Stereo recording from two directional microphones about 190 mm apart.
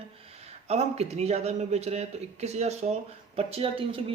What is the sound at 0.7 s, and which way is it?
Speech, 35° right (ahead or behind).